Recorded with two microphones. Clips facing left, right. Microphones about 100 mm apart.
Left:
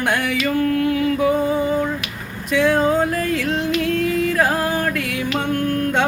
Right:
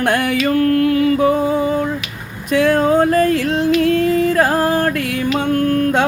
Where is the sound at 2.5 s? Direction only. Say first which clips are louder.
Right 3 dB; 45° right (ahead or behind).